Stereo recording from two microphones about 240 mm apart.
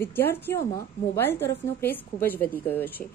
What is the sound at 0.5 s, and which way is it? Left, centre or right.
A woman's voice, centre.